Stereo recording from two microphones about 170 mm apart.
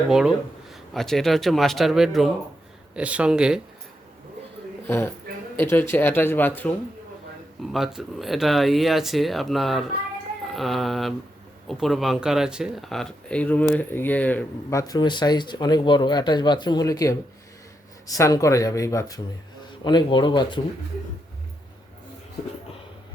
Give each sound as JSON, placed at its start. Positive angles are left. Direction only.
{"t": 0.1, "sound": "speech", "side_deg": -5}
{"t": 4.9, "sound": "speech", "side_deg": 15}
{"t": 7.7, "sound": "speech", "side_deg": 0}
{"t": 18.2, "sound": "speech", "side_deg": 20}